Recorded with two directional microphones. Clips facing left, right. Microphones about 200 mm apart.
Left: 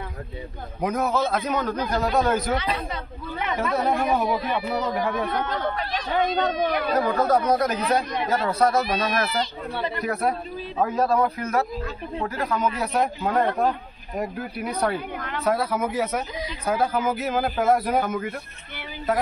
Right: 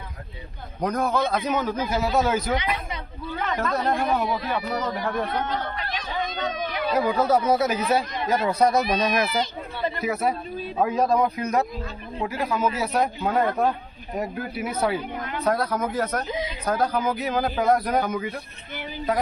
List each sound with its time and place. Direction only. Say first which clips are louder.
0.7 s a man's voice: even; 5° left (ahead or behind)
3.4 s a man's voice: left 1 dB; 5° left (ahead or behind)
6.1 s speech: left 7 dB; 60° left (ahead or behind)
7.0 s speech: right 1 dB; 10° right (ahead or behind)
10.0 s a man's voice: even; 5° right (ahead or behind)
10.8 s a man's voice: even; 15° right (ahead or behind)